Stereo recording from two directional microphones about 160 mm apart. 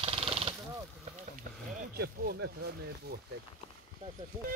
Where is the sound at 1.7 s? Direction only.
65° right (ahead or behind); by 3.1 s 90° right.